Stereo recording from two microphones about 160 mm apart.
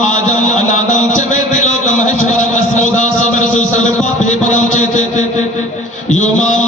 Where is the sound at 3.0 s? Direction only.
50° left (ahead or behind).